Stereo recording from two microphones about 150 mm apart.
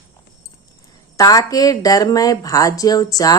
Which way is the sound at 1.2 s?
25° left (ahead or behind).